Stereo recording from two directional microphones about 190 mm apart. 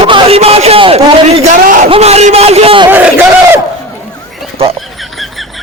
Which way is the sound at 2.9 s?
10° right (ahead or behind).